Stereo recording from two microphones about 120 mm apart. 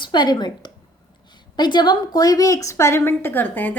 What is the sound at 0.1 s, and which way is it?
Speech, 35° left (ahead or behind).